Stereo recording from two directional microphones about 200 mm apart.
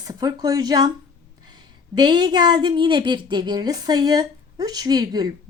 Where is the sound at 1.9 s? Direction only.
20° right (ahead or behind).